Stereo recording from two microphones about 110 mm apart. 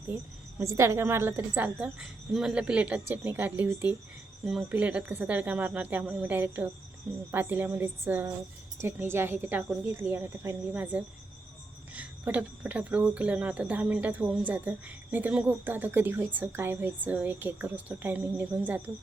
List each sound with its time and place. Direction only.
0.1 s a woman's voice: 20° right (ahead or behind)